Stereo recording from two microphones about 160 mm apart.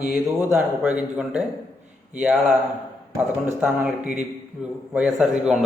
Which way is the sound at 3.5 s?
5° right (ahead or behind).